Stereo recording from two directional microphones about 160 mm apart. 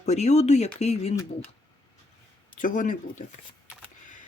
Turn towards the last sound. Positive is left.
turn(degrees=55)  # may be behind; listen again after turning